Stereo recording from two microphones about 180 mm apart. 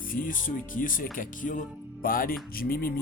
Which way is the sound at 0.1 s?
50° left (ahead or behind).